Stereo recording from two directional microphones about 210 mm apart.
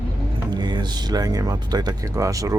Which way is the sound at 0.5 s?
20° right (ahead or behind).